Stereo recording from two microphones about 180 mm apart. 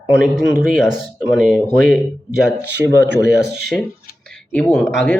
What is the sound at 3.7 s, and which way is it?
Speech, centre (ahead or behind).